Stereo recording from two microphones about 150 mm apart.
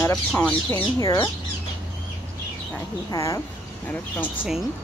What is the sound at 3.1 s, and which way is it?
Speech, 20° left (ahead or behind).